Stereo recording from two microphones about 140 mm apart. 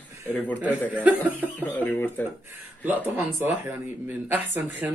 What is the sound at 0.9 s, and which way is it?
Speech, 10° right (ahead or behind).